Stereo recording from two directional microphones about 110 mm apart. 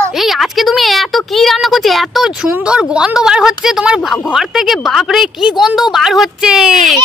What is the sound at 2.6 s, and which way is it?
Speech, 10° right (ahead or behind).